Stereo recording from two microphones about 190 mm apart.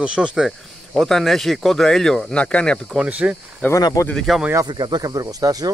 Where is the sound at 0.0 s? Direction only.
5° right (ahead or behind).